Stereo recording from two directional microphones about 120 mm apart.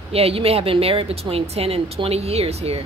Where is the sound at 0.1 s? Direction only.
55° right (ahead or behind).